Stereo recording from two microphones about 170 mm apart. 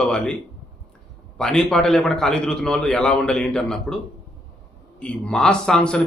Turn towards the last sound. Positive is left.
turn(degrees=5)  # may be behind; listen again after turning